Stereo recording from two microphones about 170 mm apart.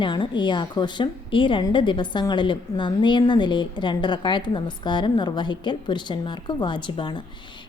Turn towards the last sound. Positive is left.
turn(degrees=30)  # may be behind; listen again after turning